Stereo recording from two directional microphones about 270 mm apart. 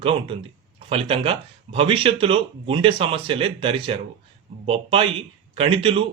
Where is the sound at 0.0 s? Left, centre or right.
Centre.